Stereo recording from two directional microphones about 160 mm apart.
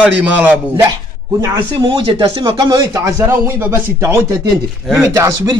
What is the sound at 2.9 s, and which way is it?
Speech, 20° right (ahead or behind).